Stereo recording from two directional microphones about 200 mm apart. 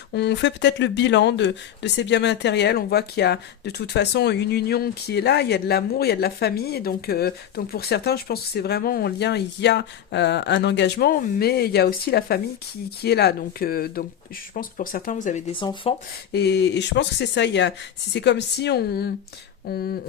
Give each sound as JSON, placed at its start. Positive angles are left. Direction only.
{"t": 0.1, "sound": "speech", "side_deg": 60}
{"t": 15.5, "sound": "speech", "side_deg": 25}
{"t": 16.3, "sound": "speech", "side_deg": 55}